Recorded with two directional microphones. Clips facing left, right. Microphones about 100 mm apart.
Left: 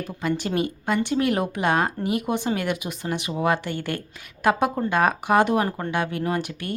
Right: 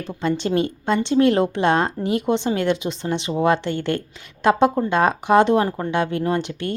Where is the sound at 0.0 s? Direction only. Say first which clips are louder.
Right 3 dB; 25° right (ahead or behind).